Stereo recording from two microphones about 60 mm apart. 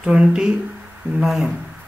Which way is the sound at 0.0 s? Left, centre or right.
Centre.